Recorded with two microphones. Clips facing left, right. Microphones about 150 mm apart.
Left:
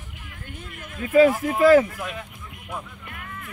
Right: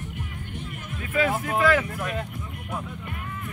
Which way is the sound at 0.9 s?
40° left (ahead or behind).